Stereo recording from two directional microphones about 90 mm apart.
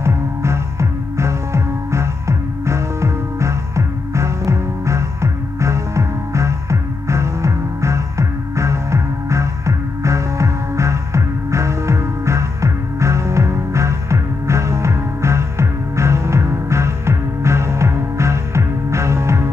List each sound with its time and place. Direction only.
0.0 s music: 30° right (ahead or behind)